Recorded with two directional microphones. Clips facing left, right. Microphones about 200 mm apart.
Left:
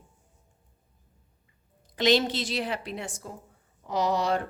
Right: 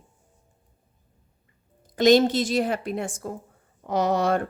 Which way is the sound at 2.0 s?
45° right (ahead or behind).